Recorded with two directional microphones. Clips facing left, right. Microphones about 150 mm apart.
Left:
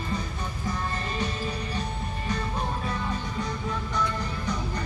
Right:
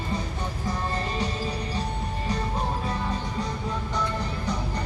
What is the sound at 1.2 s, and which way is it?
Music, 30° right (ahead or behind).